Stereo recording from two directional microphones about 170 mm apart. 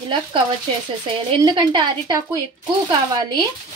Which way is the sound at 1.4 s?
30° right (ahead or behind).